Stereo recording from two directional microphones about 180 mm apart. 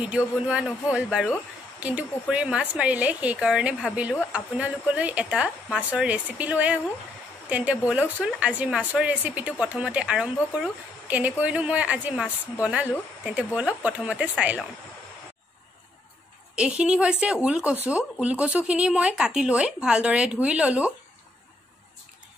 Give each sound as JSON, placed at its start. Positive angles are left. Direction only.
{"t": 0.5, "sound": "a woman's voice", "side_deg": -5}
{"t": 16.5, "sound": "a woman's voice", "side_deg": -5}